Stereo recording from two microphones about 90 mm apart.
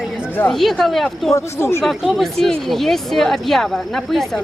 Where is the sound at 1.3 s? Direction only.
30° left (ahead or behind).